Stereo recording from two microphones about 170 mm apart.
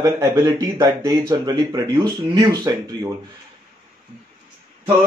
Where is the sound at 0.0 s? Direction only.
25° right (ahead or behind).